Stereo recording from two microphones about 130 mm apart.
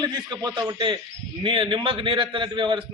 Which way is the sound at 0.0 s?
30° right (ahead or behind).